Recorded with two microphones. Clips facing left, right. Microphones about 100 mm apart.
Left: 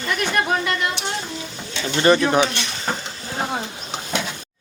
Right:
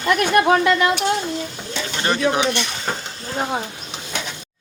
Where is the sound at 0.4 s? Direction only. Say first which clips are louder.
Right 6 dB; 90° right.